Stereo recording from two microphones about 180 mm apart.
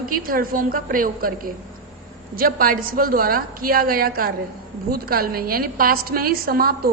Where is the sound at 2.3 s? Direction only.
55° right (ahead or behind).